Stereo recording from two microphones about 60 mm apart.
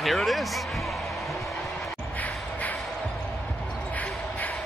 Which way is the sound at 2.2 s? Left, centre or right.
Left.